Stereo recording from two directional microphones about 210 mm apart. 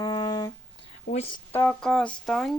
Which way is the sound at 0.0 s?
15° left (ahead or behind).